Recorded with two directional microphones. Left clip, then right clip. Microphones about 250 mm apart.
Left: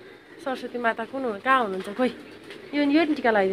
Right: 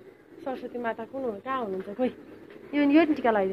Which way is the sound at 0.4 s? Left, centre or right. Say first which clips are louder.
Left 5 dB; left.